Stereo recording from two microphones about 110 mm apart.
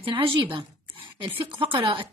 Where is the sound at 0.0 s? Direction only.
50° right (ahead or behind).